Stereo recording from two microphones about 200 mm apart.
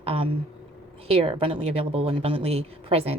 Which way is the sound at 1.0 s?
30° right (ahead or behind).